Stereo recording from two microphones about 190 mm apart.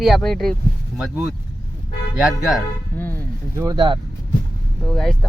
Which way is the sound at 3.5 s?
20° right (ahead or behind).